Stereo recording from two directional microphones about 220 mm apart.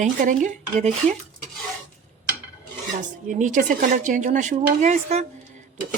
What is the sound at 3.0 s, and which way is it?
Speech, 35° right (ahead or behind).